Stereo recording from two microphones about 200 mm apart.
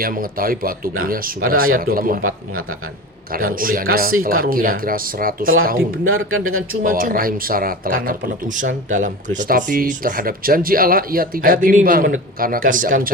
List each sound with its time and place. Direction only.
0.0 s speech: 45° right (ahead or behind)
3.3 s speech: 45° right (ahead or behind)
5.7 s speech: 90° right
6.8 s speech: 45° right (ahead or behind)